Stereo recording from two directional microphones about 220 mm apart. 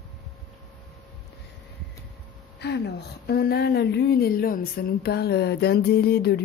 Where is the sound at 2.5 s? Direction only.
50° left (ahead or behind).